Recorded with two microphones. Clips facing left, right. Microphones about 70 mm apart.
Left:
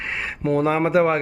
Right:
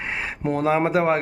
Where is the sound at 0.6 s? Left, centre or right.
Centre.